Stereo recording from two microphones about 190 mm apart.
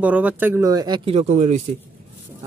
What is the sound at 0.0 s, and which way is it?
Speech, 10° right (ahead or behind).